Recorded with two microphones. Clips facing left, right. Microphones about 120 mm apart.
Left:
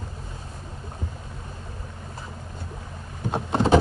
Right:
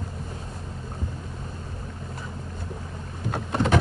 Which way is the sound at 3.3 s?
25° left (ahead or behind).